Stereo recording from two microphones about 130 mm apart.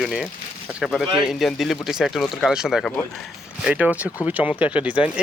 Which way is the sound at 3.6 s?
10° right (ahead or behind).